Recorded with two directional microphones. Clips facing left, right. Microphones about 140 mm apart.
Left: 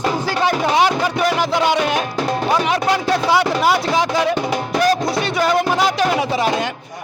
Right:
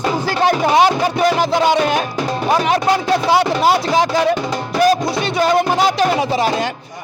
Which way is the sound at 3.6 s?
30° right (ahead or behind).